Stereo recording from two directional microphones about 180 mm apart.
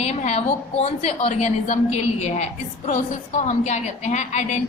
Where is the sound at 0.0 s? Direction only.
35° left (ahead or behind).